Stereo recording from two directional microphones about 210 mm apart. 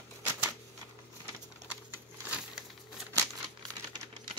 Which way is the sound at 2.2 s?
5° right (ahead or behind).